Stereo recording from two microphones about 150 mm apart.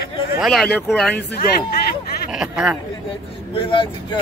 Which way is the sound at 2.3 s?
5° right (ahead or behind).